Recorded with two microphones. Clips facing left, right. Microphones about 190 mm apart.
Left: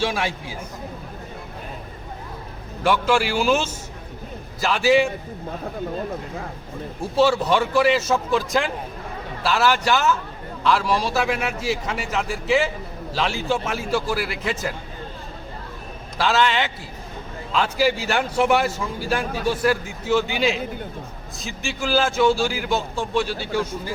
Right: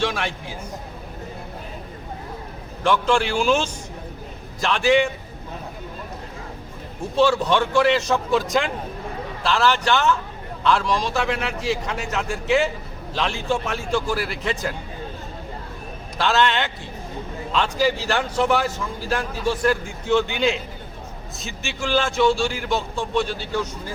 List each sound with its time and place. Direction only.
0.0 s a man's voice: 5° left (ahead or behind)
2.8 s a man's voice: 5° left (ahead or behind)
7.2 s a man's voice: 5° left (ahead or behind)
16.1 s a man's voice: centre (ahead or behind)